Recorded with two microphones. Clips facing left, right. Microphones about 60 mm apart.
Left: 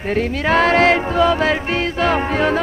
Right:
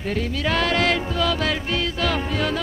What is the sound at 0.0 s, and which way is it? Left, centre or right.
Music, left.